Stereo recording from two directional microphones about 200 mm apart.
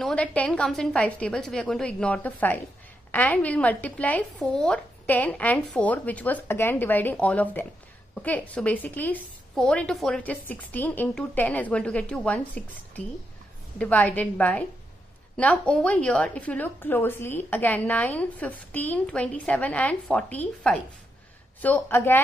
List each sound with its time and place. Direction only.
0.0 s a woman's voice: 5° left (ahead or behind)